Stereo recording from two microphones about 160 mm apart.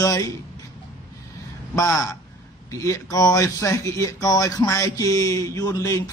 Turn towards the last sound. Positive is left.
turn(degrees=20)  # may be behind; listen again after turning